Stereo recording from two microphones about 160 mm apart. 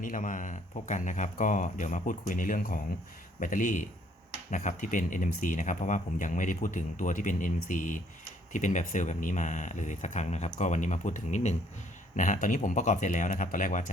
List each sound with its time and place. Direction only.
0.0 s speech: 55° left (ahead or behind)